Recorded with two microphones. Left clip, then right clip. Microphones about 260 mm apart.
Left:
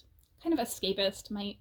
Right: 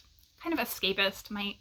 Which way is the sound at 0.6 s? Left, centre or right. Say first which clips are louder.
Right 2 dB; right.